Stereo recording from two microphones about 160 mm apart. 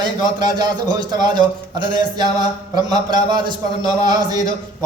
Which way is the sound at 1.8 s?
30° right (ahead or behind).